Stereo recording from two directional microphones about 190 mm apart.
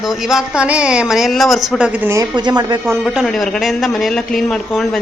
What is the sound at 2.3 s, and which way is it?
Speech, 20° right (ahead or behind).